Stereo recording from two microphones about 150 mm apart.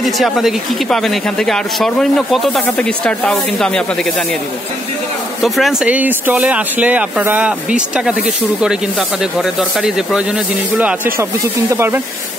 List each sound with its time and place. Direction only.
0.0 s speech: centre (ahead or behind)
5.4 s speech: centre (ahead or behind)